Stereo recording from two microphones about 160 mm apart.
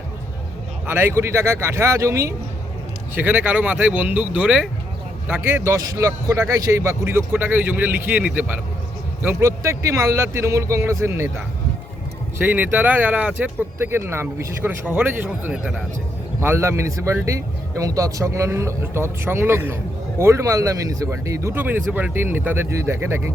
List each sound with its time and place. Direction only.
0.9 s speech: 15° right (ahead or behind)
12.4 s speech: 10° right (ahead or behind)